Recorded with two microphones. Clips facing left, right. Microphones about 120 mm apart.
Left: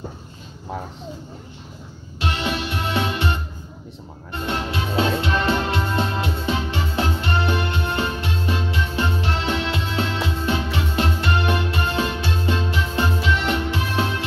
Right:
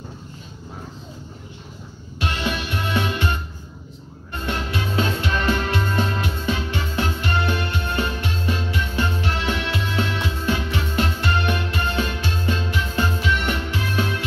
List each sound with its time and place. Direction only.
2.1 s music: 30° left (ahead or behind)